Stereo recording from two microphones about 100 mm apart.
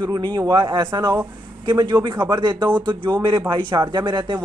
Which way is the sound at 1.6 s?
45° right (ahead or behind).